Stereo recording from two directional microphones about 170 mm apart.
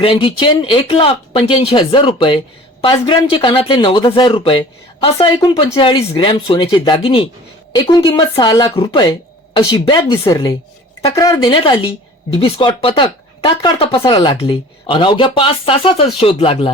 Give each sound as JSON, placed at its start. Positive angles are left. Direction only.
{"t": 0.0, "sound": "speech", "side_deg": 35}